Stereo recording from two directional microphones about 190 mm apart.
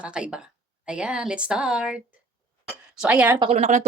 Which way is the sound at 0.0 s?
5° right (ahead or behind).